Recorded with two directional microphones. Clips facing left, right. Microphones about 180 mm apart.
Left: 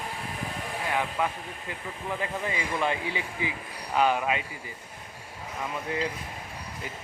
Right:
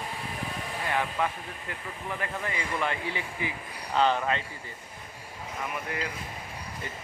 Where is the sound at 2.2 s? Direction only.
20° left (ahead or behind).